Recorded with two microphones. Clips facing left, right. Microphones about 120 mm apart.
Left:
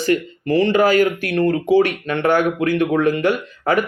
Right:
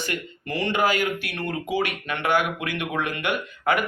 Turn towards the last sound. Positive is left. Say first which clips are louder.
# left 5 dB
turn(degrees=35)  # may be behind; listen again after turning